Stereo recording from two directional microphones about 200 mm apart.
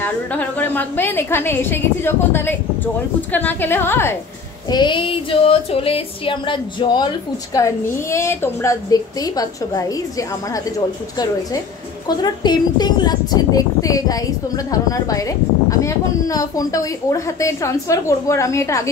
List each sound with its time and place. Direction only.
0.0 s a woman's voice: 10° left (ahead or behind)
4.6 s female singing: 20° left (ahead or behind)
12.2 s a woman's voice: 20° left (ahead or behind)